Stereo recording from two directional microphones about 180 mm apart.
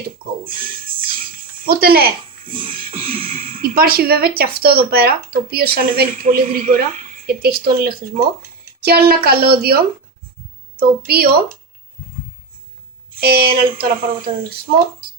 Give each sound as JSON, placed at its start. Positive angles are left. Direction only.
{"t": 0.4, "sound": "a sound", "side_deg": -50}
{"t": 2.9, "sound": "beatboxing", "side_deg": -30}
{"t": 3.6, "sound": "speech", "side_deg": -55}
{"t": 10.8, "sound": "speech", "side_deg": -55}
{"t": 13.1, "sound": "speech", "side_deg": -60}
{"t": 13.7, "sound": "speech", "side_deg": -30}